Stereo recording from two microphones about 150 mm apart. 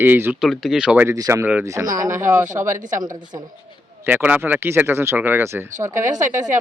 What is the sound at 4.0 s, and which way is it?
Speech, 10° right (ahead or behind).